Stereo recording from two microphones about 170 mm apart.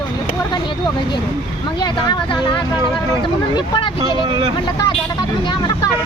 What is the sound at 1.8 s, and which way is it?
Speech, 25° left (ahead or behind).